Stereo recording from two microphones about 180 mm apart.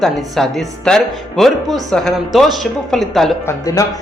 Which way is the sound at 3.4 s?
20° left (ahead or behind).